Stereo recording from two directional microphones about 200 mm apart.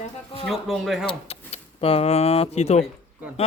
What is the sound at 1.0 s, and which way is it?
Speech, 30° left (ahead or behind).